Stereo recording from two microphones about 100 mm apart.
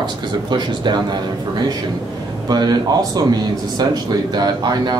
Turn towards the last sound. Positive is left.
turn(degrees=-45)  # may be behind; listen again after turning